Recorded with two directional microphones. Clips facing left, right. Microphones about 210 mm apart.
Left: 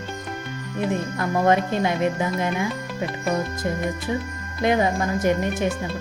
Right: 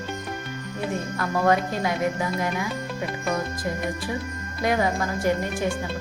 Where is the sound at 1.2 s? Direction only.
25° left (ahead or behind).